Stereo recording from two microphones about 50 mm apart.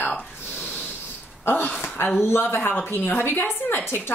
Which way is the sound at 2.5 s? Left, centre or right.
Left.